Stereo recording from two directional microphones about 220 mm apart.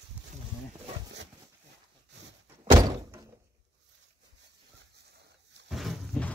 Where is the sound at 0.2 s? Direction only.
5° right (ahead or behind).